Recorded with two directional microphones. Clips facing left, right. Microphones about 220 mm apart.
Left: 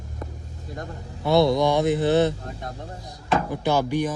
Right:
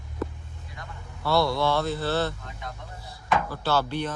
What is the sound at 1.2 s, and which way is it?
A man's voice, 20° left (ahead or behind).